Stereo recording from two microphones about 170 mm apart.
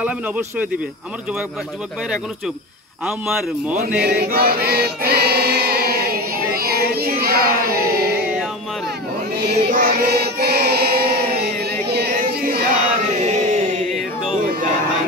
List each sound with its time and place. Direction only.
3.1 s speech: 5° right (ahead or behind)
3.7 s chant: 65° right (ahead or behind)
9.4 s choir: 75° right (ahead or behind)
13.2 s a sound: 40° right (ahead or behind)